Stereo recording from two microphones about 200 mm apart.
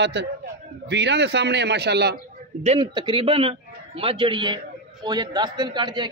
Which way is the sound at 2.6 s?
25° right (ahead or behind).